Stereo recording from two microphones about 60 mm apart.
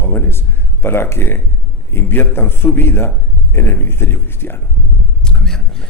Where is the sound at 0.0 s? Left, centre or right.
Left.